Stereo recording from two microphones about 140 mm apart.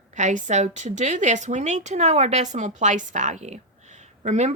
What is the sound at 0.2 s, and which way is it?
A woman's voice, 60° right (ahead or behind).